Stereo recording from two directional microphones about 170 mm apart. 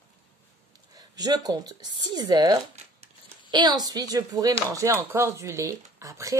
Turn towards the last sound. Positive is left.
turn(degrees=-20)  # may be behind; listen again after turning